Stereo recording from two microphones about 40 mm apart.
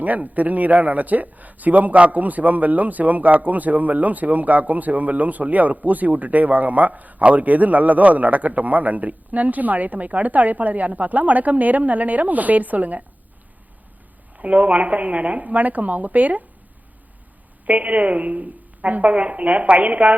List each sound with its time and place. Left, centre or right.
0.0 s a man's voice: right
14.3 s a woman's voice: right
17.7 s a woman's voice: right